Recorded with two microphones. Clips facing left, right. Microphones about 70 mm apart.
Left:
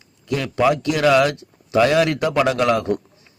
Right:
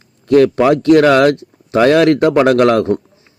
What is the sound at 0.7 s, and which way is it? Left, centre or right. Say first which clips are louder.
Speech: right 10 dB; right.